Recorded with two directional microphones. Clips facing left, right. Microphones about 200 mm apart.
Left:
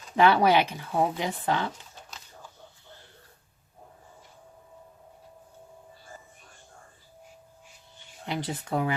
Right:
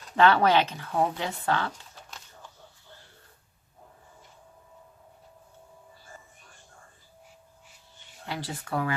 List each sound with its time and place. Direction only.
0.2 s speech: 10° left (ahead or behind)
8.3 s speech: 20° left (ahead or behind)